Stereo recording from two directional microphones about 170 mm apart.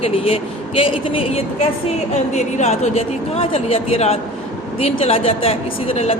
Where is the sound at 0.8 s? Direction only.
30° left (ahead or behind).